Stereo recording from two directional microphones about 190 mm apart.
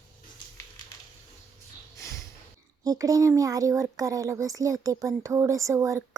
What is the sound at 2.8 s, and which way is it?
A child's voice, 20° right (ahead or behind).